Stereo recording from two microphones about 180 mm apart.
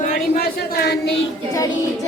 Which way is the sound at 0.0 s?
55° left (ahead or behind).